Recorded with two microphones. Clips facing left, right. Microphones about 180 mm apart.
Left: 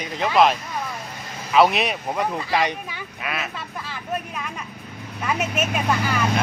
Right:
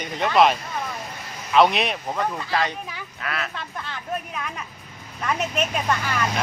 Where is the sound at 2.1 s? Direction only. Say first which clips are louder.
Left 2 dB; 15° left (ahead or behind).